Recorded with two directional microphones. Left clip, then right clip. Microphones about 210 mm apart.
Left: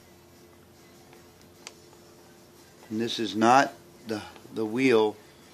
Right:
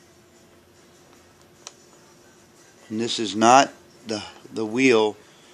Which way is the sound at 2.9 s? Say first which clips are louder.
Right 4 dB; 15° right (ahead or behind).